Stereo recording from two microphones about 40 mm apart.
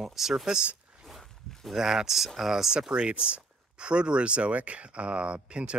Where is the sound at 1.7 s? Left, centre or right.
Centre.